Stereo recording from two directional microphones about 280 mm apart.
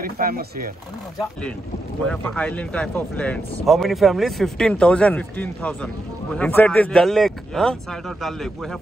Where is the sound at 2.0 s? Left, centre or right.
Centre.